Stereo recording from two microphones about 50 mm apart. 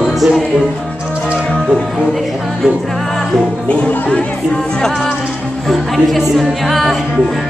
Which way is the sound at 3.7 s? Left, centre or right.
Left.